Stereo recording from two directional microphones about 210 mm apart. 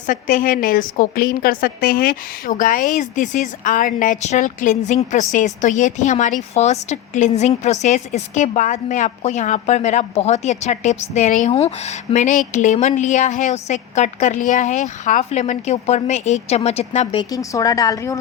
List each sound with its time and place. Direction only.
0.1 s a woman's voice: 40° left (ahead or behind)
17.3 s a woman's voice: 15° left (ahead or behind)